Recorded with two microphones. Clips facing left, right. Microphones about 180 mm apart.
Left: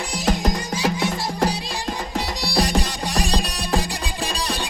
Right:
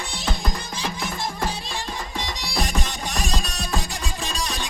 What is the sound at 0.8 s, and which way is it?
Music, 80° left.